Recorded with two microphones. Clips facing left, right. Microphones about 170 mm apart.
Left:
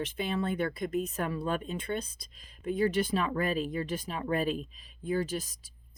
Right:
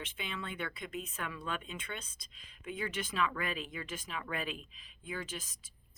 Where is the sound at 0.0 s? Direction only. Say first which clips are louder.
Left 11 dB; 40° left (ahead or behind).